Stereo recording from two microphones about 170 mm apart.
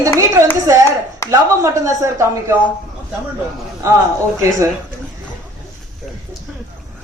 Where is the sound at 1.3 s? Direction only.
15° right (ahead or behind).